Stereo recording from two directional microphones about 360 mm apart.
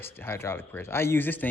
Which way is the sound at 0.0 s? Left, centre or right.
Centre.